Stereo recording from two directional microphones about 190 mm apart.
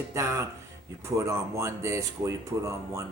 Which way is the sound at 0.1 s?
15° right (ahead or behind).